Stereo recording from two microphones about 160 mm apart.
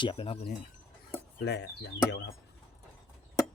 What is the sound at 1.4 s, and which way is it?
Speech, 90° left.